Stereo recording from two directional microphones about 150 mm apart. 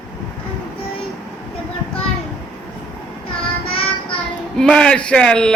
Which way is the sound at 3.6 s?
40° left (ahead or behind).